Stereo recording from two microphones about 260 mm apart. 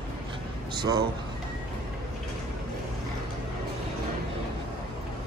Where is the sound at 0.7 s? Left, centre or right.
Centre.